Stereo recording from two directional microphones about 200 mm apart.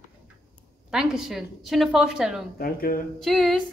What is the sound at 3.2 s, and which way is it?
Speech, centre (ahead or behind).